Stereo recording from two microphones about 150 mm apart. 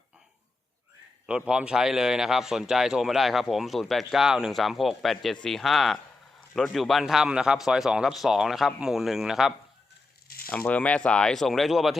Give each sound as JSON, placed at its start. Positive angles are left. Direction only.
{"t": 1.3, "sound": "a man's voice", "side_deg": -5}
{"t": 10.2, "sound": "a sound", "side_deg": 80}
{"t": 10.5, "sound": "a man's voice", "side_deg": 10}